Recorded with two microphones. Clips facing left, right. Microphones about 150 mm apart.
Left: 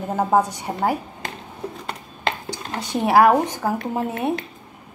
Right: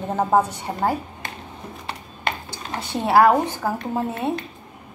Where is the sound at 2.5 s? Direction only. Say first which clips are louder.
Left 2 dB; 15° left (ahead or behind).